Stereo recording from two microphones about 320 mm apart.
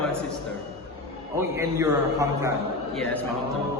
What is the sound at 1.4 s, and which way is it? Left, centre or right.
Speech, centre.